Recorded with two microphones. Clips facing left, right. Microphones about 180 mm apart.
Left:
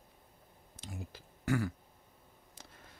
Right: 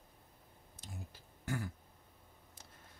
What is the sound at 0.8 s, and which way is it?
Speech, 90° left.